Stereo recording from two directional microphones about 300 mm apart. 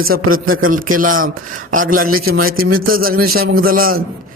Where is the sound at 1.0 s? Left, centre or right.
Right.